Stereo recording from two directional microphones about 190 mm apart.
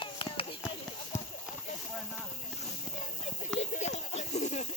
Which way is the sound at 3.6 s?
35° left (ahead or behind).